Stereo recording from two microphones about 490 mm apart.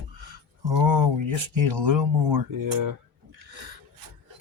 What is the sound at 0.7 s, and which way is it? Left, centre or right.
Speech, right.